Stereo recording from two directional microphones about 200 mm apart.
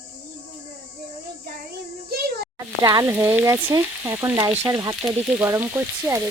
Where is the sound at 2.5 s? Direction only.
15° right (ahead or behind).